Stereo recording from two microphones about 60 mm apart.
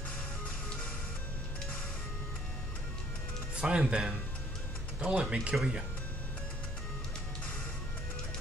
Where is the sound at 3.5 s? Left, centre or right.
Centre.